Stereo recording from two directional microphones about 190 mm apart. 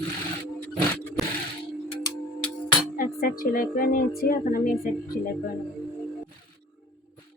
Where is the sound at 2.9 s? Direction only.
50° left (ahead or behind).